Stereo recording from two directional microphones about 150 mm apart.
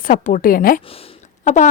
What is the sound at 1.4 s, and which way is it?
Speech, 55° left (ahead or behind).